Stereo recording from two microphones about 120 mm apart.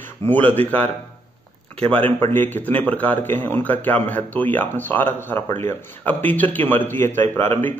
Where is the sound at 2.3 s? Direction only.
15° left (ahead or behind).